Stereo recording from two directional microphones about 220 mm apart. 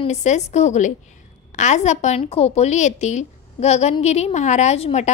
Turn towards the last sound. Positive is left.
turn(degrees=30)  # may be behind; listen again after turning